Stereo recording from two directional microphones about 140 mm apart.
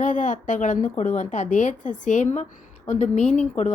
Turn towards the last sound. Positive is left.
turn(degrees=60)  # may be behind; listen again after turning